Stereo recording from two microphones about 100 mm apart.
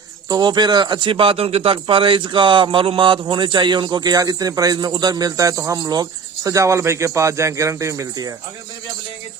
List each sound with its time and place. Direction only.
0.3 s speech: 45° right (ahead or behind)